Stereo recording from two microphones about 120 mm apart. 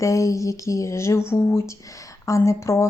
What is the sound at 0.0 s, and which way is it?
Speech, 25° left (ahead or behind).